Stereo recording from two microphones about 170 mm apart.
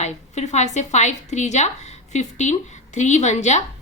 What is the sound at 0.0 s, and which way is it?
A woman's voice, 40° left (ahead or behind).